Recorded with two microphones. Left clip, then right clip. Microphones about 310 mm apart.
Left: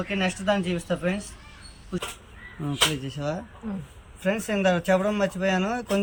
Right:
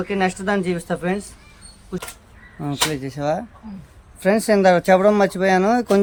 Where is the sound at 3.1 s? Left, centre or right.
Centre.